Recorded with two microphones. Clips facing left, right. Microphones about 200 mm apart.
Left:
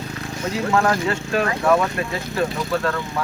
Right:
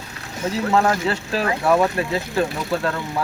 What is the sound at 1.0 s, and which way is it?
Speech, 30° right (ahead or behind).